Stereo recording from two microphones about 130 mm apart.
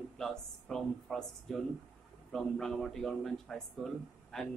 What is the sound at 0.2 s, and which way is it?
Speech, 5° left (ahead or behind).